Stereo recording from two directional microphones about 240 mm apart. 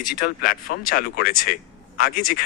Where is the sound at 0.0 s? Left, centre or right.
Left.